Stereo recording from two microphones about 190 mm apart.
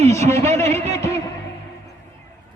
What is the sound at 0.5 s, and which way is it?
Speech, 15° left (ahead or behind).